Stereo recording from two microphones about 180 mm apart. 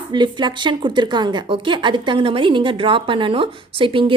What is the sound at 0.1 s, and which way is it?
A woman's voice, 25° right (ahead or behind).